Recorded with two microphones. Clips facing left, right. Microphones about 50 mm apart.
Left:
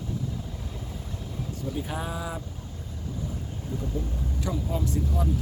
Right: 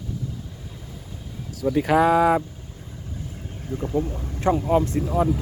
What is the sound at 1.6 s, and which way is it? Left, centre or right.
Speech, right.